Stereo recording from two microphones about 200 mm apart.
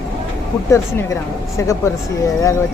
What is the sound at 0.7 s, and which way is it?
A woman's voice, 15° left (ahead or behind).